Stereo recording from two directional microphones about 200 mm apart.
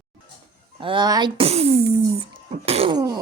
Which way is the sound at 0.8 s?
25° right (ahead or behind).